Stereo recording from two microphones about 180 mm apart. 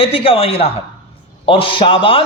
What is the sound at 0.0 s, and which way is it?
A man's voice, 30° left (ahead or behind).